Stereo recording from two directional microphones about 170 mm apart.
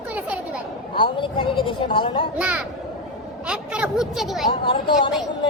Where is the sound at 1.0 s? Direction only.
30° left (ahead or behind).